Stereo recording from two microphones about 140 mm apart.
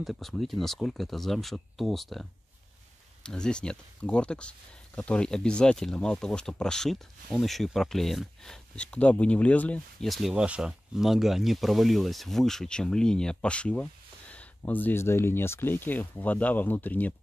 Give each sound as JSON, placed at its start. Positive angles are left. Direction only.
{"t": 0.0, "sound": "speech", "side_deg": 0}
{"t": 3.3, "sound": "speech", "side_deg": 5}